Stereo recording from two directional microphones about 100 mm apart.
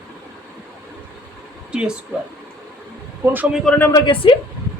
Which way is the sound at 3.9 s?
55° left (ahead or behind).